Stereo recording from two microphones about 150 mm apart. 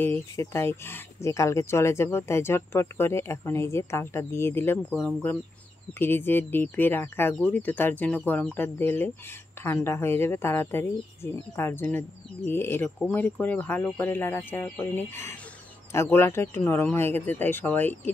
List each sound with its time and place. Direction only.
0.0 s speech: 15° left (ahead or behind)
4.9 s speech: 5° left (ahead or behind)